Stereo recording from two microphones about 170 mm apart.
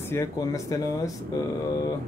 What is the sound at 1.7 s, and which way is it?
Mantra, 20° left (ahead or behind).